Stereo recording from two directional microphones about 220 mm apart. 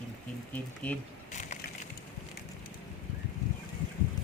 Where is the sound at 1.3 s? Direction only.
35° left (ahead or behind).